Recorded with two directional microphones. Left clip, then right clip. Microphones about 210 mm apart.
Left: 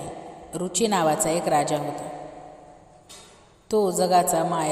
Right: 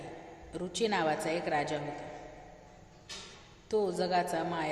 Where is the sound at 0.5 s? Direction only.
30° left (ahead or behind).